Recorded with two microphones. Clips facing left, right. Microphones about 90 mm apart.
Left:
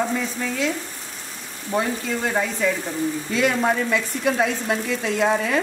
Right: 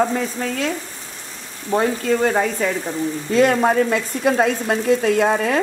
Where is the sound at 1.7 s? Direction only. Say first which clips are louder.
Right 5 dB; 45° right (ahead or behind).